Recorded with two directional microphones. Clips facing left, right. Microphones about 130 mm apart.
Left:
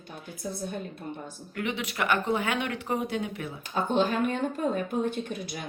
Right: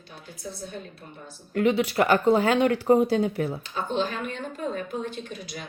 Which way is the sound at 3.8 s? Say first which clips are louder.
Left 3 dB; 50° left (ahead or behind).